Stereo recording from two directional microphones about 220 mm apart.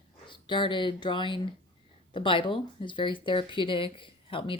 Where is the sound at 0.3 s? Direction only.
20° left (ahead or behind).